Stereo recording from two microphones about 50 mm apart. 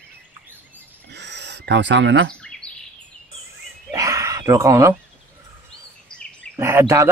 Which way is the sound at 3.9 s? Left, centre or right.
Right.